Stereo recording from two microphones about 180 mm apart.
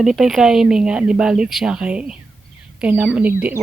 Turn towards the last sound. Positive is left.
turn(degrees=-10)  # may be behind; listen again after turning